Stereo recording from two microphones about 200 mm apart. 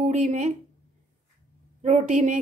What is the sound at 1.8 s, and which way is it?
Speech, 35° right (ahead or behind).